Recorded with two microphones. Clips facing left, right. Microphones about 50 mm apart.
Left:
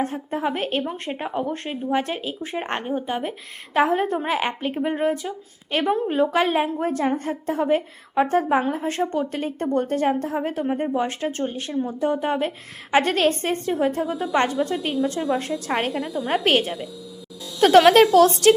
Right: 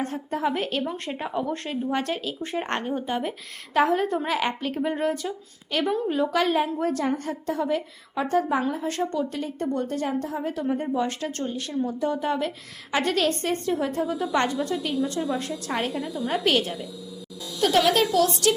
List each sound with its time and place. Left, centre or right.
0.0 s a woman's voice: centre
1.9 s speech: centre
3.8 s a woman's voice: left
5.9 s a woman's voice: left
17.6 s speech: left